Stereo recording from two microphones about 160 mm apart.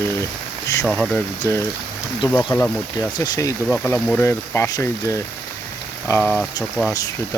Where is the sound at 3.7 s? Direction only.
5° left (ahead or behind).